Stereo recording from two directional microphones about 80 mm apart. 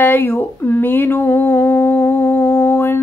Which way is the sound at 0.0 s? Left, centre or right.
Left.